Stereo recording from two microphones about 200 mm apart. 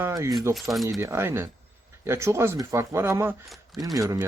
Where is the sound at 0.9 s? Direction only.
15° right (ahead or behind).